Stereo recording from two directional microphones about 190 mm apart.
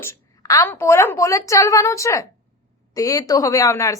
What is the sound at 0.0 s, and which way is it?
Speech, 15° left (ahead or behind).